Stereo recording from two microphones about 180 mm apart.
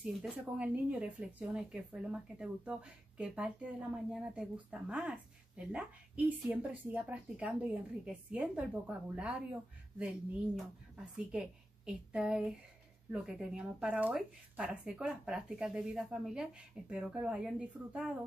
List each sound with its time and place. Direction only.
0.0 s a woman's voice: 5° right (ahead or behind)